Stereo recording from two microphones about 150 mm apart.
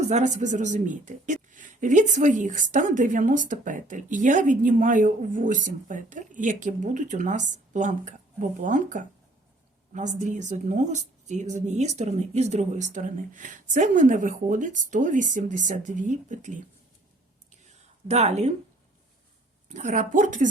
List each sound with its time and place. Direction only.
0.0 s speech: 50° right (ahead or behind)
17.7 s a sound: 45° right (ahead or behind)
19.6 s speech: 55° right (ahead or behind)